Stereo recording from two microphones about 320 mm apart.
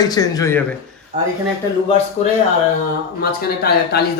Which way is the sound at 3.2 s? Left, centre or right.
Left.